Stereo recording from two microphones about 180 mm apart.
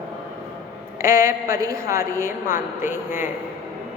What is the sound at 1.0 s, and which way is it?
A woman's voice, 15° right (ahead or behind).